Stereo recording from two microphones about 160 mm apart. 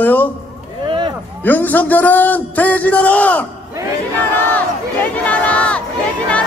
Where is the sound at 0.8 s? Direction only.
30° right (ahead or behind).